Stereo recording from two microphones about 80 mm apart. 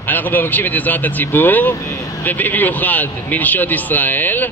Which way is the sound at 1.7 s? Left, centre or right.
Left.